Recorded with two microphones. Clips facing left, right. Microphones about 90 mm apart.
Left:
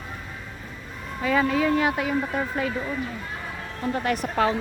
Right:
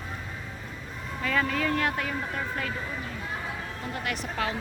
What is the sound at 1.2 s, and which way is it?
Speech, 15° left (ahead or behind).